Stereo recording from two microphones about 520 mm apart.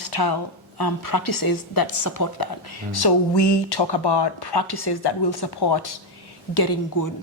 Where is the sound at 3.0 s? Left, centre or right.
Left.